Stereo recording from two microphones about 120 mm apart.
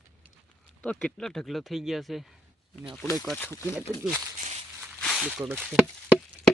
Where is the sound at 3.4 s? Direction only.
20° left (ahead or behind).